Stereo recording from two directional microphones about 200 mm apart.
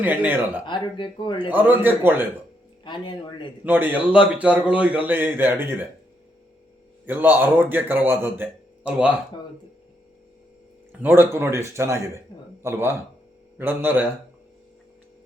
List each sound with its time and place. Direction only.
0.0 s a man's voice: 10° right (ahead or behind)
0.6 s speech: 25° left (ahead or behind)
1.4 s a man's voice: 10° right (ahead or behind)
2.8 s speech: 25° left (ahead or behind)
3.6 s a man's voice: 10° right (ahead or behind)
7.0 s a man's voice: 10° right (ahead or behind)
11.0 s a man's voice: 10° right (ahead or behind)